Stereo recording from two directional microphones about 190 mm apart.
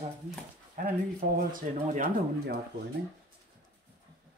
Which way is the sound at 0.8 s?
45° right (ahead or behind).